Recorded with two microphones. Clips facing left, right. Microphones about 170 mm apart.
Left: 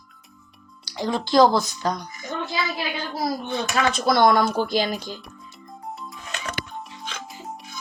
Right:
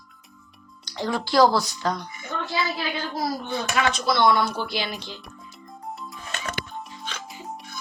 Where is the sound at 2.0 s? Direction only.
40° left (ahead or behind).